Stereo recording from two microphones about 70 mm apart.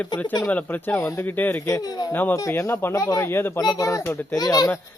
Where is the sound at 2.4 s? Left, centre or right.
Left.